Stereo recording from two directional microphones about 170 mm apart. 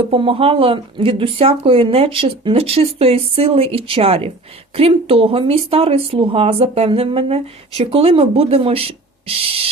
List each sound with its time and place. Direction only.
0.0 s speech: 35° right (ahead or behind)